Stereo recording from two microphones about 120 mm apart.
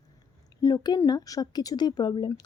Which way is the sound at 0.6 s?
35° left (ahead or behind).